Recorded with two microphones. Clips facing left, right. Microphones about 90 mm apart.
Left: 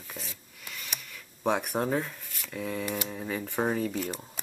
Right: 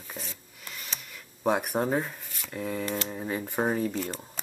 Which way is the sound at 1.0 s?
5° right (ahead or behind).